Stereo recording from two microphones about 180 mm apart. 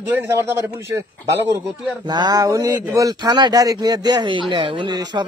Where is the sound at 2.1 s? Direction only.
20° right (ahead or behind).